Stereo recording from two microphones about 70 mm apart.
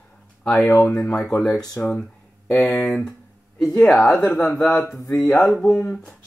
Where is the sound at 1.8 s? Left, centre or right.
Left.